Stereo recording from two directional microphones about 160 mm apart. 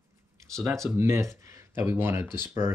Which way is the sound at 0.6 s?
20° right (ahead or behind).